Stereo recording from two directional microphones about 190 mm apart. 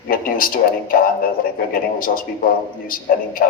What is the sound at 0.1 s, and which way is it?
Speech, 50° left (ahead or behind).